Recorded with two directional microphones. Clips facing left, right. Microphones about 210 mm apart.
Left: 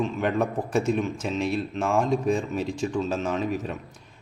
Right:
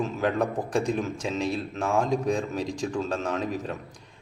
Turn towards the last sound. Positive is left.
turn(degrees=0)  # may be behind; listen again after turning